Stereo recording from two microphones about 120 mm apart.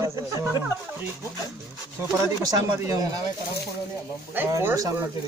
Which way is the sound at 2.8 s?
30° right (ahead or behind).